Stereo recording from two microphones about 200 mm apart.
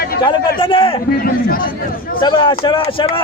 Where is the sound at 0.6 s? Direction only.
25° left (ahead or behind).